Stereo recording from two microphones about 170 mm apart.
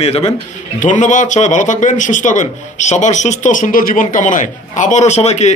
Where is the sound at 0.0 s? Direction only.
40° left (ahead or behind).